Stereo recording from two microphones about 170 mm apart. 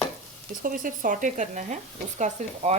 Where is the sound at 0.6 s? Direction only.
50° right (ahead or behind).